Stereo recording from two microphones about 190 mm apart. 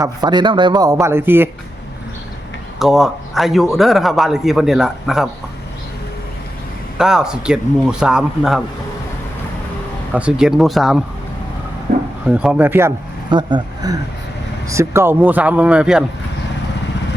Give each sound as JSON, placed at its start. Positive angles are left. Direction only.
{"t": 0.0, "sound": "a man's voice", "side_deg": -20}
{"t": 2.7, "sound": "a man's voice", "side_deg": 0}
{"t": 7.0, "sound": "a man's voice", "side_deg": -5}
{"t": 10.1, "sound": "a man's voice", "side_deg": -5}
{"t": 12.2, "sound": "speech", "side_deg": -5}
{"t": 13.3, "sound": "a man's voice", "side_deg": -20}